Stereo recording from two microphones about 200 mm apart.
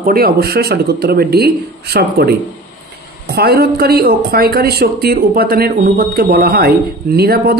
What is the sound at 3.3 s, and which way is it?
A man's voice, 50° right (ahead or behind).